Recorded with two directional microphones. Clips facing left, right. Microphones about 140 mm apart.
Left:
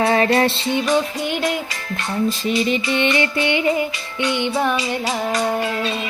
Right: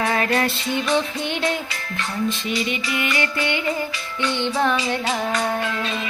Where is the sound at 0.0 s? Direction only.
30° left (ahead or behind).